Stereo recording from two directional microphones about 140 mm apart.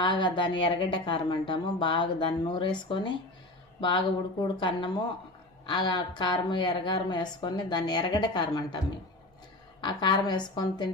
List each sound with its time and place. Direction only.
0.0 s speech: 35° left (ahead or behind)
9.8 s speech: 35° left (ahead or behind)